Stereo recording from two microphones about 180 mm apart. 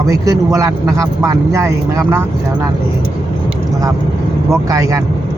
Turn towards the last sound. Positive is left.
turn(degrees=-20)  # may be behind; listen again after turning